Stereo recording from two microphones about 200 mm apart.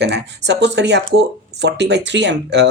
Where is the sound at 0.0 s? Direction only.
60° right (ahead or behind).